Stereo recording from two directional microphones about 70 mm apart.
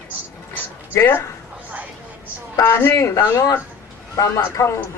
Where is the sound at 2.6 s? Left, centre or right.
Left.